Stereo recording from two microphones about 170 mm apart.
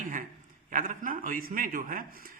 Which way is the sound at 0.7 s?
50° right (ahead or behind).